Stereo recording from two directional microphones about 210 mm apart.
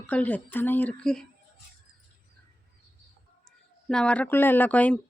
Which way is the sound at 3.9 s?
5° left (ahead or behind).